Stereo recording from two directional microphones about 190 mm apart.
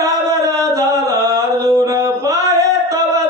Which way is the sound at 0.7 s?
15° right (ahead or behind).